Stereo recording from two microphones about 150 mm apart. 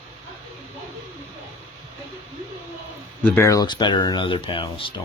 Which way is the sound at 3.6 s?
30° left (ahead or behind).